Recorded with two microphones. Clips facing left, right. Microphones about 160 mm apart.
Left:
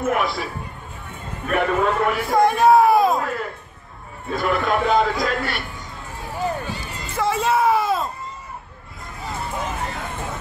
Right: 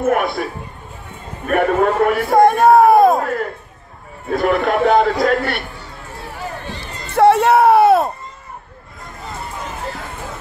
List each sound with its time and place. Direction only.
0.0 s a man's voice: 55° right (ahead or behind)
1.5 s a man's voice: 50° right (ahead or behind)
6.7 s a sound: 10° left (ahead or behind)
7.1 s music: 65° right (ahead or behind)